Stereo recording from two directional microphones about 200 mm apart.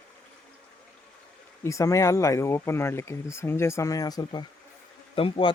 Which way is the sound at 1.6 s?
15° left (ahead or behind).